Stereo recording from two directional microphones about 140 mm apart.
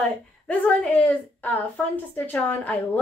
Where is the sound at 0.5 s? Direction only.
10° left (ahead or behind).